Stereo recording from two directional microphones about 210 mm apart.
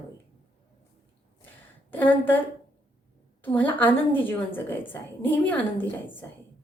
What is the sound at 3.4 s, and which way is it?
Speech, 10° left (ahead or behind).